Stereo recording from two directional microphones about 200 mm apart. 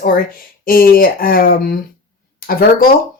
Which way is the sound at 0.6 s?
45° left (ahead or behind).